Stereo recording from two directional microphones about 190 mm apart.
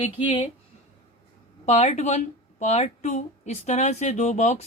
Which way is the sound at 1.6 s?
35° left (ahead or behind).